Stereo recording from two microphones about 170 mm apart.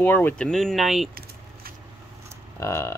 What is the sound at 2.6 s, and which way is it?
Speech, 15° left (ahead or behind).